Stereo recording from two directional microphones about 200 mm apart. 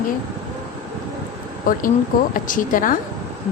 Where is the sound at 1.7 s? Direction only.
45° left (ahead or behind).